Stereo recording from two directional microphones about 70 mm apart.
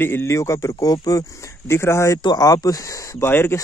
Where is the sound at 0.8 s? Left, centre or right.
Left.